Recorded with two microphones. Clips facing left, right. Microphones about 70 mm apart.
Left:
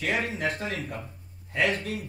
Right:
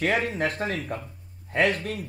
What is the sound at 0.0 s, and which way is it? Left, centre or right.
A man's voice, right.